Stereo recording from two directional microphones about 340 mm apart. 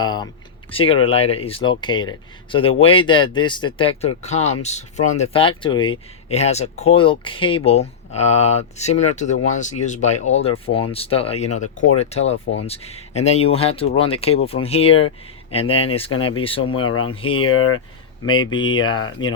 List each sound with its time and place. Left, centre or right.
0.0 s speech: centre
16.1 s speech: left
16.4 s speech: centre
16.8 s speech: left
17.2 s speech: centre
17.4 s speech: left
18.3 s speech: centre